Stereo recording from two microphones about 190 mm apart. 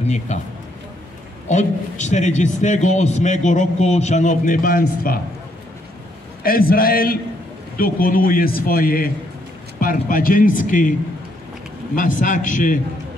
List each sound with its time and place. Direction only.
0.0 s a man's voice: 35° left (ahead or behind)
1.5 s a man's voice: 40° left (ahead or behind)
6.4 s a man's voice: 50° left (ahead or behind)